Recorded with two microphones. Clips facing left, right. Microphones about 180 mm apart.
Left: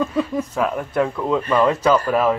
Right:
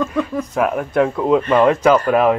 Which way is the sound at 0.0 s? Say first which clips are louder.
Right 1 dB; 10° left (ahead or behind).